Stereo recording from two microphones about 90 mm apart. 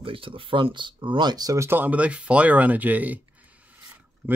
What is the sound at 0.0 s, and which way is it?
Speech, 80° right.